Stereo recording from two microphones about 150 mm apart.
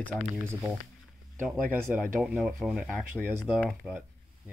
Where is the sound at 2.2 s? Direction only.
Centre (ahead or behind).